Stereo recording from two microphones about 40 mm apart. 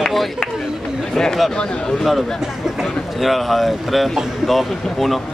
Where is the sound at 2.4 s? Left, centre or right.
Centre.